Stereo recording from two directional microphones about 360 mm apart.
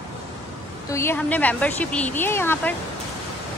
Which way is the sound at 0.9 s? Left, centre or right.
Centre.